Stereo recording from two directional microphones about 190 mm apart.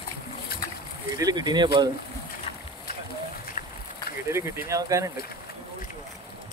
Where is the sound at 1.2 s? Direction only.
20° right (ahead or behind).